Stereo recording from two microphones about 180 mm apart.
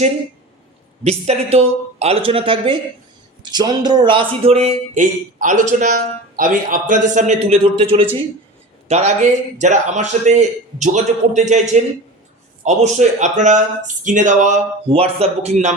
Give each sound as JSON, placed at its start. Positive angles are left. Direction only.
{"t": 1.0, "sound": "a man's voice", "side_deg": -35}